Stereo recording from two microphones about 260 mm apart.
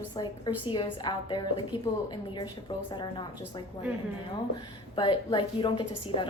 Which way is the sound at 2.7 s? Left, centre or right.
Centre.